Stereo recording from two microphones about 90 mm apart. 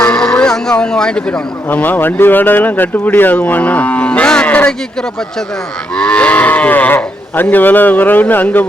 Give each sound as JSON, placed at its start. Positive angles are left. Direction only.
{"t": 0.0, "sound": "speech", "side_deg": 10}
{"t": 6.0, "sound": "speech", "side_deg": 15}